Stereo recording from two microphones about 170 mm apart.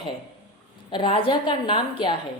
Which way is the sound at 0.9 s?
30° left (ahead or behind).